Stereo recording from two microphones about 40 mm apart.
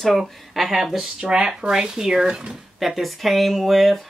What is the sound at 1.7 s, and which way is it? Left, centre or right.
Speech, centre.